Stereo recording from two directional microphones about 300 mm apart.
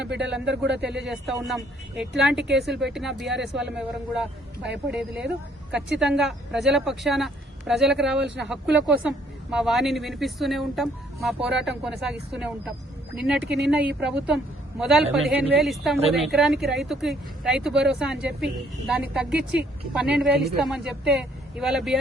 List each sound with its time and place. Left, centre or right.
0.2 s speech: centre
0.4 s speech: right
1.0 s speech: centre
13.4 s speech: right
13.7 s speech: centre